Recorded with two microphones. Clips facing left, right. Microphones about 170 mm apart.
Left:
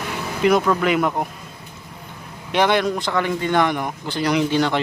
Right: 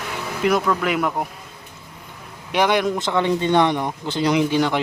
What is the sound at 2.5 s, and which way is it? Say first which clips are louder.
A man's voice: left 1 dB; 10° right (ahead or behind).